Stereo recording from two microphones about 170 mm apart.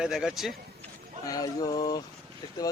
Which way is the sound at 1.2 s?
20° left (ahead or behind).